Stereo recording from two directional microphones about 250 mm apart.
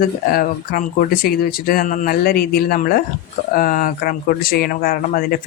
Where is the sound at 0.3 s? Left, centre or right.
Left.